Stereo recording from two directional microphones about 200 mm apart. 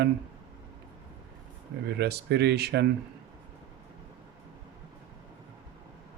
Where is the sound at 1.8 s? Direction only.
55° right (ahead or behind).